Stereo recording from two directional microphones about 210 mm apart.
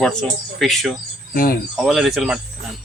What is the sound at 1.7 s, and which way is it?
Speech, centre (ahead or behind).